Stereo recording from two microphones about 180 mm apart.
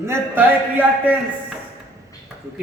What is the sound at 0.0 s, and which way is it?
A man's voice, 10° right (ahead or behind).